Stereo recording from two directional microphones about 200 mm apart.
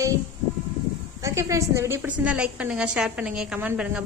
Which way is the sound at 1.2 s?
15° right (ahead or behind).